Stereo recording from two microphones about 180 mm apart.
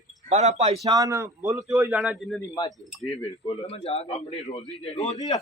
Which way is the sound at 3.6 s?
35° left (ahead or behind).